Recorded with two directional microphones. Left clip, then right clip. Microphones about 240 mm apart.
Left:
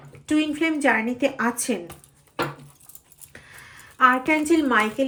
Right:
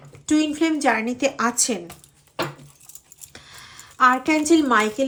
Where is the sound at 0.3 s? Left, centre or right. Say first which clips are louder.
Right 2 dB; centre.